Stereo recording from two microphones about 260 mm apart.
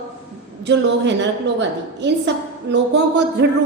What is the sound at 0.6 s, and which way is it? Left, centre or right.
A woman's voice, right.